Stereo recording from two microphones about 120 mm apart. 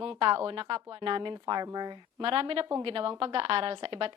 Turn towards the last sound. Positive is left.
turn(degrees=-45)  # may be behind; listen again after turning